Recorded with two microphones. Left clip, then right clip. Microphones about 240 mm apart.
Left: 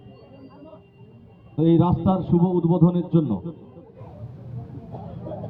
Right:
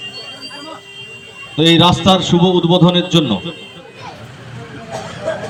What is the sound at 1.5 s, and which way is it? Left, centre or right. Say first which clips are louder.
A man's voice: right 10 dB; right.